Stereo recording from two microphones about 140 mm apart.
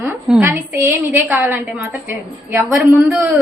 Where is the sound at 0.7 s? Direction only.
20° right (ahead or behind).